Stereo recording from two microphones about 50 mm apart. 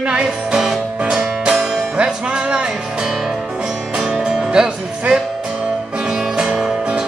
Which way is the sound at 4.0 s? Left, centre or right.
Centre.